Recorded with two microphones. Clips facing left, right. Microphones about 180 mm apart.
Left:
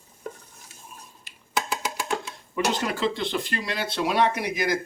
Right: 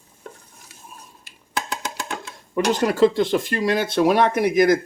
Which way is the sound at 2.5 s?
45° right (ahead or behind).